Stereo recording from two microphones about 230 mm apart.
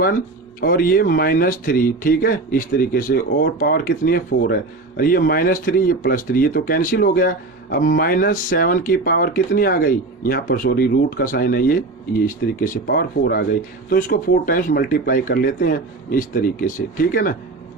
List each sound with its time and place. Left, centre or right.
0.6 s speech: left